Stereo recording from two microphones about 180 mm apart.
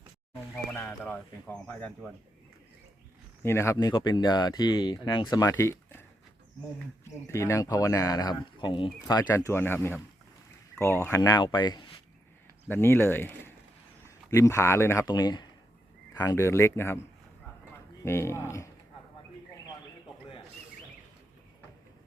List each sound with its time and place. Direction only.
0.7 s speech: 5° left (ahead or behind)
3.4 s speech: 15° left (ahead or behind)
7.0 s speech: 15° left (ahead or behind)
12.6 s speech: 10° left (ahead or behind)
18.0 s speech: 15° left (ahead or behind)